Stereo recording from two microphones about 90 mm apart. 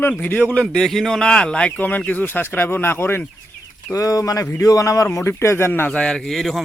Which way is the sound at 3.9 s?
40° left (ahead or behind).